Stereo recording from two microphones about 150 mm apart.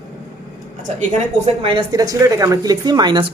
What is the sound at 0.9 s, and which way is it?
A woman's voice, 45° right (ahead or behind).